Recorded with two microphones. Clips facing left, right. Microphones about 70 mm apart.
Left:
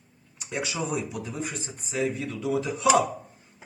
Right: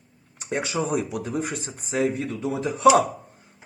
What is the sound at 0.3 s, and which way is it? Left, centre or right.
Speech, right.